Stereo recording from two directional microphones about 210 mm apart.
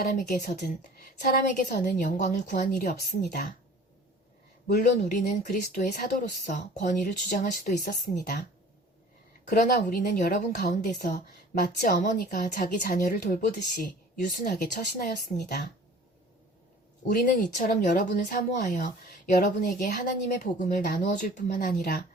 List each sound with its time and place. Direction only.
0.1 s a woman's voice: 45° left (ahead or behind)
4.6 s a woman's voice: 40° left (ahead or behind)
9.5 s a woman's voice: 45° left (ahead or behind)
17.1 s speech: 40° left (ahead or behind)